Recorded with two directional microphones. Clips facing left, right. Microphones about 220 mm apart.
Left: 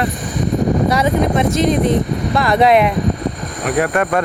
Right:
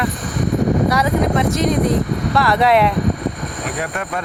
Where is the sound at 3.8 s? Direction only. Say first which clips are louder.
Left 11 dB; 65° left (ahead or behind).